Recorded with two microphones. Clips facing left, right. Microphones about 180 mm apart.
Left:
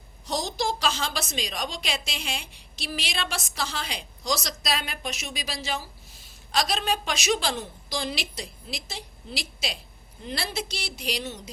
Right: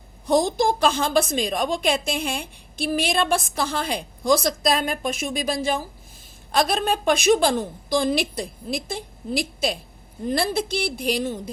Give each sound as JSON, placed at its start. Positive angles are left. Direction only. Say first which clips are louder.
{"t": 0.3, "sound": "a woman's voice", "louder": "right 9 dB", "side_deg": -55}